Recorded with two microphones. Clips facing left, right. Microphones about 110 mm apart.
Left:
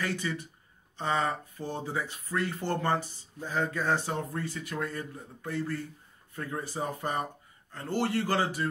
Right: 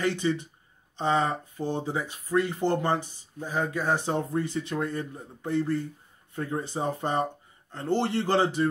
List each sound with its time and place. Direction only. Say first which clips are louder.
0.0 s speech: right 6 dB; 20° right (ahead or behind)